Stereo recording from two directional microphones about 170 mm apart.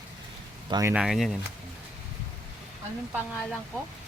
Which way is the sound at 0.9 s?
Centre (ahead or behind).